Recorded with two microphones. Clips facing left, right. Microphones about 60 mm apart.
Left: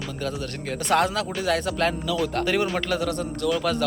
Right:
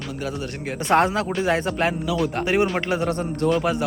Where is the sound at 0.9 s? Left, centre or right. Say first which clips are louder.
Right 3 dB; right.